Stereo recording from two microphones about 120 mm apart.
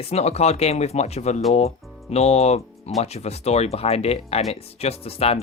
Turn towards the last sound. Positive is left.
turn(degrees=55)  # may be behind; listen again after turning